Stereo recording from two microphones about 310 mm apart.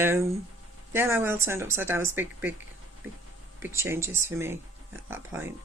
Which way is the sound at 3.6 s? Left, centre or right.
Centre.